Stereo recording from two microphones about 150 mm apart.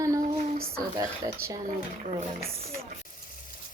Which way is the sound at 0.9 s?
20° right (ahead or behind).